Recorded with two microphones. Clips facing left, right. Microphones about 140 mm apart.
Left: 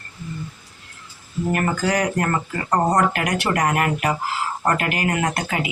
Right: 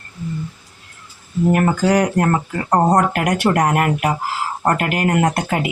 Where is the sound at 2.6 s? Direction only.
40° right (ahead or behind).